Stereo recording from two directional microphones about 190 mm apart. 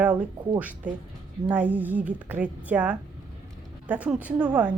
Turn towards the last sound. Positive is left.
turn(degrees=-5)  # may be behind; listen again after turning